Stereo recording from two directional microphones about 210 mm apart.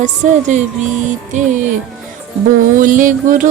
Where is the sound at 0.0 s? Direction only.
35° right (ahead or behind).